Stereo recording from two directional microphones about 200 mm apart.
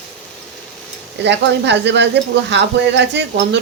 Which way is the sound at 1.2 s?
60° right (ahead or behind).